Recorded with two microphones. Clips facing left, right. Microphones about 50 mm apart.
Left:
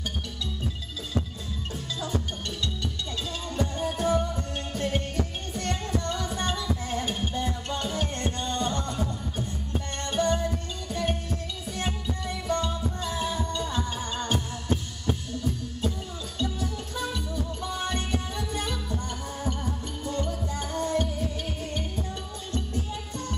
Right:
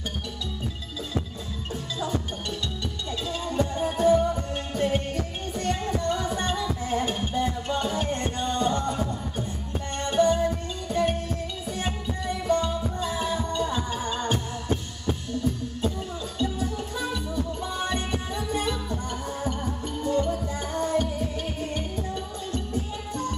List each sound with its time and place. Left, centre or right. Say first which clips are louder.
3.4 s music: right 3 dB; centre
16.3 s music: right 3 dB; centre